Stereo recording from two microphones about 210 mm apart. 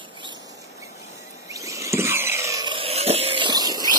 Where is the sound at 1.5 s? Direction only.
15° right (ahead or behind).